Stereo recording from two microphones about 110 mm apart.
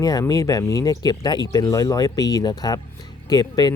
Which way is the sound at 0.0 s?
30° left (ahead or behind).